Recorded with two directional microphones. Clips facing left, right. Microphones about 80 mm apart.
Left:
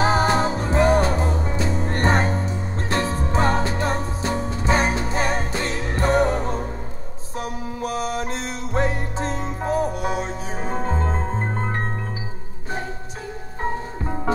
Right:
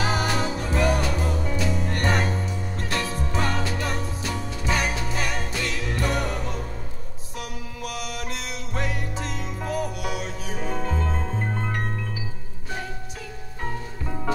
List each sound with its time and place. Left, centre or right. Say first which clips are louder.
0.0 s music: left 6 dB; left
13.6 s music: left 6 dB; left